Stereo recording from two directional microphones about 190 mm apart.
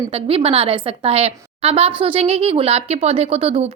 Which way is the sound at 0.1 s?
30° right (ahead or behind).